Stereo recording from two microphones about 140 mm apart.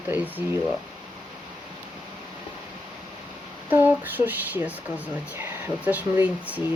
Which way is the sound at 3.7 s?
15° right (ahead or behind).